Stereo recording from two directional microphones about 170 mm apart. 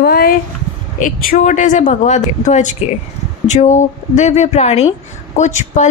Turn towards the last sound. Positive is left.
turn(degrees=45)  # may be behind; listen again after turning